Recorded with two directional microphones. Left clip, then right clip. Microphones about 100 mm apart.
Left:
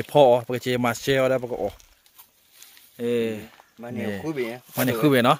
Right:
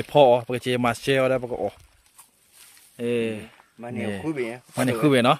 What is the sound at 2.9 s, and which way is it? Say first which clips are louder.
Speech: left 1 dB; 15° right (ahead or behind).